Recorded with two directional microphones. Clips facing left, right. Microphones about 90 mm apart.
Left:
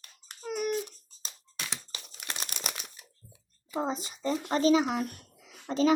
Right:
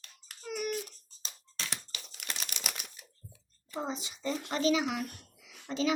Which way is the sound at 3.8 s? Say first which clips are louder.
Left 5 dB; 40° left (ahead or behind).